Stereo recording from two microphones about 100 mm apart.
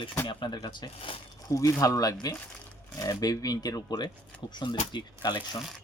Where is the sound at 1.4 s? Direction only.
35° left (ahead or behind).